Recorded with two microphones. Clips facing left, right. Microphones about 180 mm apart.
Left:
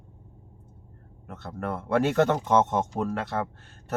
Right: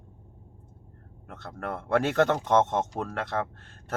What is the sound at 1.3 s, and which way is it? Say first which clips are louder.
Speech: left 3 dB; 5° left (ahead or behind).